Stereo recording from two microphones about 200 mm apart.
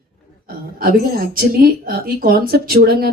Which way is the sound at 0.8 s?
50° right (ahead or behind).